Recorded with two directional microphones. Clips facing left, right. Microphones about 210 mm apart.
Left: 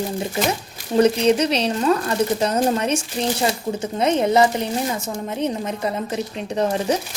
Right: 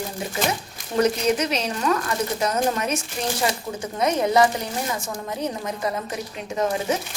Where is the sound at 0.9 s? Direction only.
30° left (ahead or behind).